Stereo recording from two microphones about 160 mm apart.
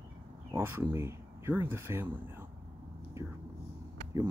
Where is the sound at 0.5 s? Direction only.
15° right (ahead or behind).